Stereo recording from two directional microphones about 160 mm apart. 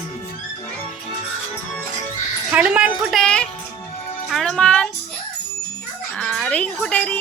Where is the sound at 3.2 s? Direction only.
5° left (ahead or behind).